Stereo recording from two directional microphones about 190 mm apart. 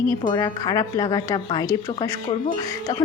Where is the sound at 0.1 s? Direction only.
20° left (ahead or behind).